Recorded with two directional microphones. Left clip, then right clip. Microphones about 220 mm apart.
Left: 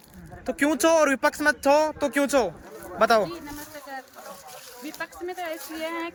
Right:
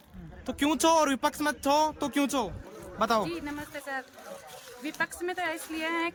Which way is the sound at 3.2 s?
15° right (ahead or behind).